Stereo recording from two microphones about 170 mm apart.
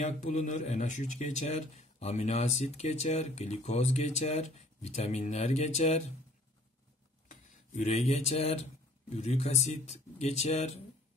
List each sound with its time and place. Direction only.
0.0 s speech: 45° left (ahead or behind)
7.2 s speech: 45° left (ahead or behind)